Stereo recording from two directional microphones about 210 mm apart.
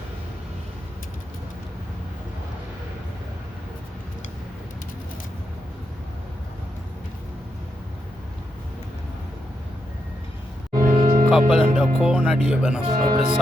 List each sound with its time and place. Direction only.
10.8 s music: 40° right (ahead or behind)
11.3 s music: 5° right (ahead or behind)
12.0 s speech: 5° right (ahead or behind)
12.8 s speech: 30° right (ahead or behind)